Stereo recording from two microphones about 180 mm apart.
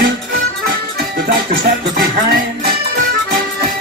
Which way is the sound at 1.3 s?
60° right (ahead or behind).